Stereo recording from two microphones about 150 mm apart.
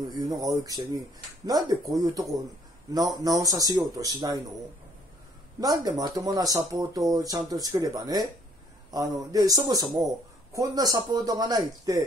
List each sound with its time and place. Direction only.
0.1 s speech: 25° right (ahead or behind)
5.6 s speech: 25° right (ahead or behind)